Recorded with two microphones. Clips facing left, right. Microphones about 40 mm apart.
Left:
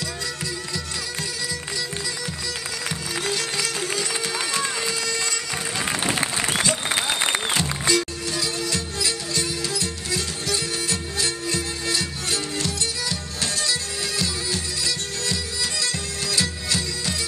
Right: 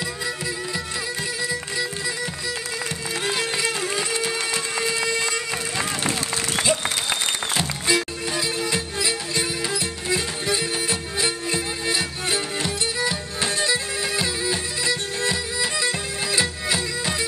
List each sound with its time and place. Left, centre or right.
3.3 s music: centre
5.0 s bagpipes: right
6.6 s applause: centre
7.8 s music: centre